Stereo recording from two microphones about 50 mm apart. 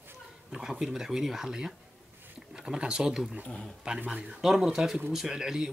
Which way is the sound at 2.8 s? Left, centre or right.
Centre.